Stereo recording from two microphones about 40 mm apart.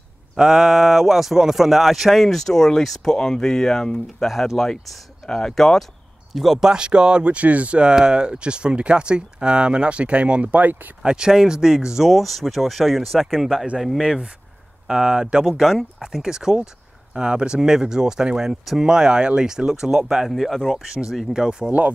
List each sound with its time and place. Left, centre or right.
0.4 s speech: centre
2.2 s speech: centre
6.3 s speech: centre
6.6 s speech: right
7.9 s speech: right
11.0 s speech: centre
14.0 s speech: centre
15.4 s speech: centre
16.1 s speech: centre
20.2 s speech: centre
20.8 s speech: centre